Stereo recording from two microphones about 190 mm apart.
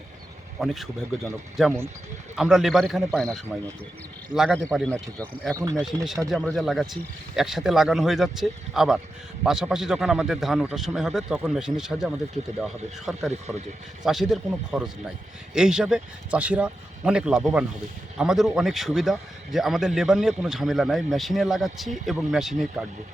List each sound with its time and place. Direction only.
0.6 s a man's voice: centre (ahead or behind)
5.5 s speech: 15° right (ahead or behind)
6.3 s a man's voice: centre (ahead or behind)